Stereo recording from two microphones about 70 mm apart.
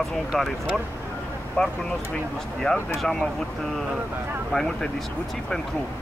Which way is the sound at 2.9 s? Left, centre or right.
Centre.